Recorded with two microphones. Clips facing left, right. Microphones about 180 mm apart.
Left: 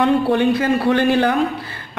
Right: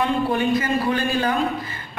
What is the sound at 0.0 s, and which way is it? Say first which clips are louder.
A woman's voice: left 6 dB; 70° left (ahead or behind).